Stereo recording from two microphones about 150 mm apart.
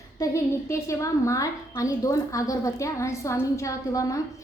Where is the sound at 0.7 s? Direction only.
20° left (ahead or behind).